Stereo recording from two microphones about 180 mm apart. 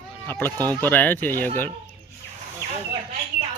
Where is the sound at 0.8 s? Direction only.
10° left (ahead or behind).